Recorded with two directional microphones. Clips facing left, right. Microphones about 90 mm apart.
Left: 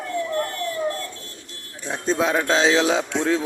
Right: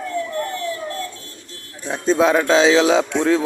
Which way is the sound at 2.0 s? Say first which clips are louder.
Right 5 dB; 90° right.